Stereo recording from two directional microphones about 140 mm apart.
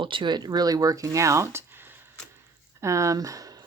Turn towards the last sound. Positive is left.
turn(degrees=-25)  # may be behind; listen again after turning